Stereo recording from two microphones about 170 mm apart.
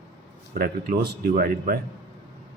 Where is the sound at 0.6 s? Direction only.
60° right (ahead or behind).